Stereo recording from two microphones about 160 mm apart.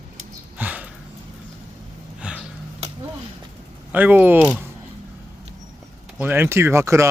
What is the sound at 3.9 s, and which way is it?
Speech, 10° right (ahead or behind).